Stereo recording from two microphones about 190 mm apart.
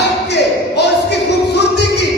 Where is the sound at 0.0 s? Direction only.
65° left (ahead or behind).